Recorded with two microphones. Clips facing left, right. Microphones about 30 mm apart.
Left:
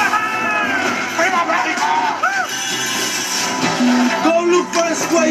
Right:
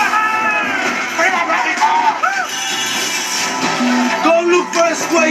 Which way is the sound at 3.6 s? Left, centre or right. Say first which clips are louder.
Left 1 dB; centre.